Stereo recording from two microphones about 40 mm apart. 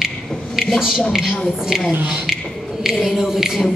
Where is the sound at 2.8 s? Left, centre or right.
Centre.